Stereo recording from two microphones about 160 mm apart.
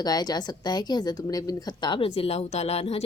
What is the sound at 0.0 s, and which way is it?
A woman's voice, 25° left (ahead or behind).